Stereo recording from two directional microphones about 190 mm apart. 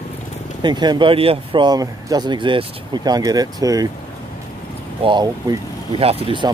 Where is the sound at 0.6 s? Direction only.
25° right (ahead or behind).